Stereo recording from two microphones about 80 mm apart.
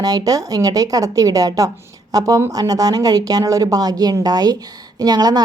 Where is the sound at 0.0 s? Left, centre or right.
Right.